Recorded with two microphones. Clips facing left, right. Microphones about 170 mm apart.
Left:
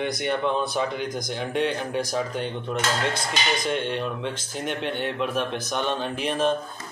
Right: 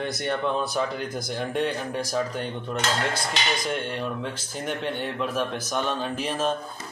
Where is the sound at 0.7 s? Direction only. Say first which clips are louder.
Left 1 dB; 5° right (ahead or behind).